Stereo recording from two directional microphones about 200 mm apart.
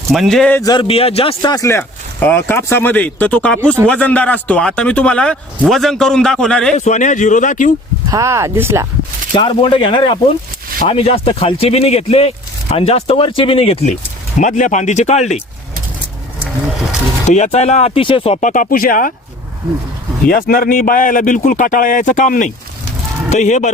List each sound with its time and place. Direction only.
0.1 s speech: centre (ahead or behind)
0.6 s speech: 20° left (ahead or behind); by 6.7 s 5° left (ahead or behind)
6.7 s a man's voice: 35° left (ahead or behind)
8.1 s speech: 15° right (ahead or behind)
9.3 s a man's voice: 25° left (ahead or behind)
17.2 s a man's voice: 35° left (ahead or behind)
20.2 s a man's voice: 45° left (ahead or behind)